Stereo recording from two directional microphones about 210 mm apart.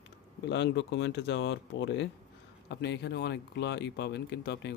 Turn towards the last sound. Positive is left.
turn(degrees=55)  # may be behind; listen again after turning